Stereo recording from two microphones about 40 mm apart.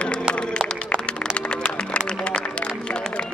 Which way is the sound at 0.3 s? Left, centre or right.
Left.